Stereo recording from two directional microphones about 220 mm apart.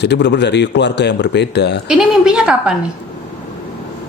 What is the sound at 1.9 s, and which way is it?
Speech, 5° right (ahead or behind).